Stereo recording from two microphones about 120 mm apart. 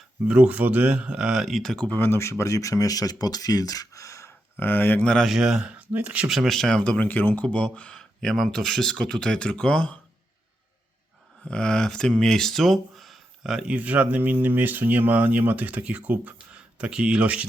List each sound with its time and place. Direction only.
0.3 s speech: 10° right (ahead or behind); by 10.0 s 10° left (ahead or behind)
11.4 s speech: 5° left (ahead or behind); by 17.4 s 10° right (ahead or behind)